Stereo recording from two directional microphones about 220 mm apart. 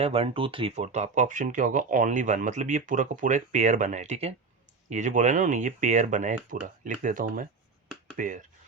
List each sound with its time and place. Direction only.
0.0 s speech: 25° right (ahead or behind)